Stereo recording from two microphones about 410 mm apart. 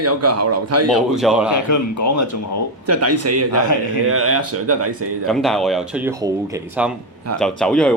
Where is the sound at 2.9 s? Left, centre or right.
Right.